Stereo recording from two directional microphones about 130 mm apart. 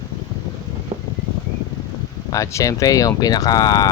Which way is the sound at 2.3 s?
25° left (ahead or behind).